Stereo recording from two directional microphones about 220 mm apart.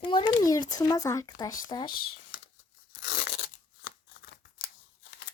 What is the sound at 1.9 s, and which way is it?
Speech, 45° left (ahead or behind).